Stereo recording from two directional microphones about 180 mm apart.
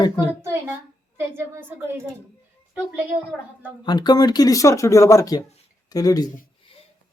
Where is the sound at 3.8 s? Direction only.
25° left (ahead or behind).